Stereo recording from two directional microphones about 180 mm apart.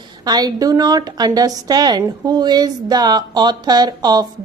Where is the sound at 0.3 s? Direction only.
20° right (ahead or behind).